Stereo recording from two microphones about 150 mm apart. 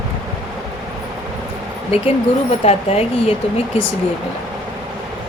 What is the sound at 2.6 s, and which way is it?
Speech, 45° left (ahead or behind).